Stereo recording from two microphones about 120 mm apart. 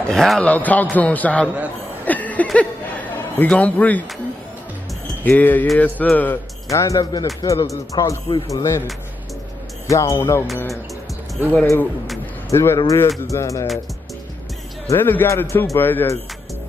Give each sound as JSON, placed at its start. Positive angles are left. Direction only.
{"t": 0.0, "sound": "a man's voice", "side_deg": 5}
{"t": 2.0, "sound": "a sound", "side_deg": 15}
{"t": 5.2, "sound": "a man's voice", "side_deg": 15}
{"t": 6.7, "sound": "speech", "side_deg": 25}
{"t": 9.8, "sound": "speech", "side_deg": 25}
{"t": 11.6, "sound": "speech", "side_deg": 20}
{"t": 14.9, "sound": "a man's voice", "side_deg": 15}